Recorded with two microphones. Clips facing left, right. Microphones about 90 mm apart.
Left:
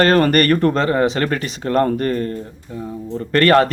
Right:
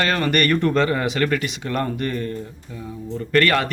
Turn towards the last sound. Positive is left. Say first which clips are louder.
# left 5 dB
turn(degrees=35)  # may be behind; listen again after turning